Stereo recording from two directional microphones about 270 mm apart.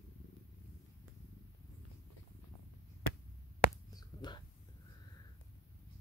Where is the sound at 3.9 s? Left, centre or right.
Centre.